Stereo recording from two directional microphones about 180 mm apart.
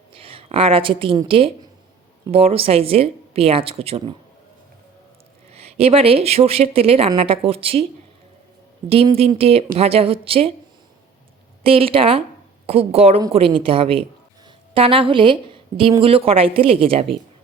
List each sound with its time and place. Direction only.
0.1 s speech: 30° right (ahead or behind)
5.5 s speech: 35° right (ahead or behind)
8.9 s speech: 30° right (ahead or behind)
11.6 s speech: 30° right (ahead or behind)